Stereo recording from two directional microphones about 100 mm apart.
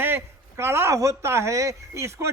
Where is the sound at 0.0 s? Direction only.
25° right (ahead or behind).